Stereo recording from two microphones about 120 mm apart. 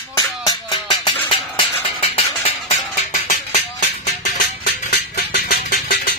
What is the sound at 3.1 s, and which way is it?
Music, 90° left.